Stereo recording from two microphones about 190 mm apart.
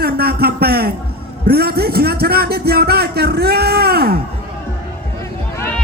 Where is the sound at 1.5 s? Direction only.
55° right (ahead or behind).